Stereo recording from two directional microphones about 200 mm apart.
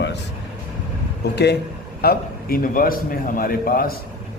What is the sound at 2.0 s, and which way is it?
A man's voice, 50° left (ahead or behind).